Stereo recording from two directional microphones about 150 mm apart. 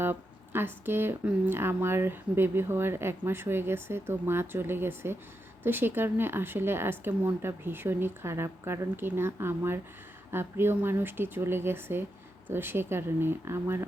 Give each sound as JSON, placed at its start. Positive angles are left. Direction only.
{"t": 0.0, "sound": "speech", "side_deg": -15}